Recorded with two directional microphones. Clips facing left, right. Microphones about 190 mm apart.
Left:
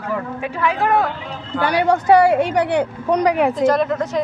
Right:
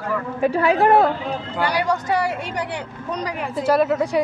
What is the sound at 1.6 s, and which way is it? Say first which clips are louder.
A woman's voice: left 5 dB; 55° left (ahead or behind).